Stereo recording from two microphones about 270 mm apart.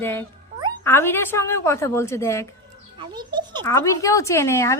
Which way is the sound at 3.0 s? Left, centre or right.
Centre.